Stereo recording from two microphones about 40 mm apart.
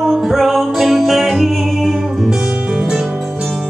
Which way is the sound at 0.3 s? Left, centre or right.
Centre.